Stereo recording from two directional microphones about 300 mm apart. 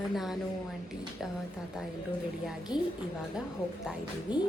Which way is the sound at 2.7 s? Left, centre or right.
Centre.